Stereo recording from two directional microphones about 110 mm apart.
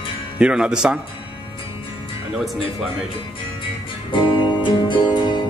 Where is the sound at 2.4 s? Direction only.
Centre (ahead or behind).